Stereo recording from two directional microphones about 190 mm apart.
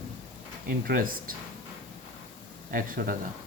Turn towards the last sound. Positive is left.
turn(degrees=-50)  # may be behind; listen again after turning